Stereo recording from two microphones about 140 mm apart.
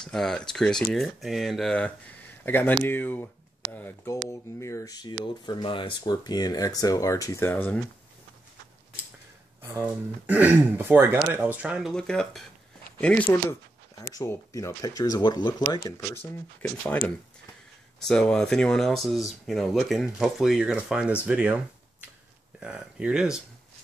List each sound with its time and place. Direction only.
0.0 s speech: 5° left (ahead or behind)
9.8 s speech: 10° right (ahead or behind)
11.9 s speech: 5° left (ahead or behind); by 15.5 s 30° left (ahead or behind)
16.0 s speech: 20° left (ahead or behind)
18.0 s speech: 5° left (ahead or behind)
22.6 s speech: 5° right (ahead or behind)